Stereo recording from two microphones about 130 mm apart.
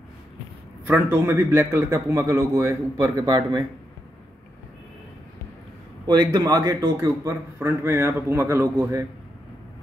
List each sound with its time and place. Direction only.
0.8 s a man's voice: 15° right (ahead or behind)
6.0 s a man's voice: 30° right (ahead or behind)